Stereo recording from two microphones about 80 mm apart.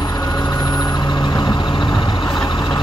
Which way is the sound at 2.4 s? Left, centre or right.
Left.